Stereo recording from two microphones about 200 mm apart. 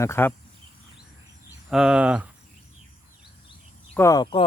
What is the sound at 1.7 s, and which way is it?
Speech, 5° right (ahead or behind).